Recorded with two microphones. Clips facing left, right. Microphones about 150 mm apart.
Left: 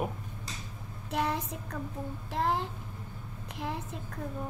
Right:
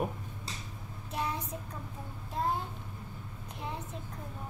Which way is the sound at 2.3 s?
80° left.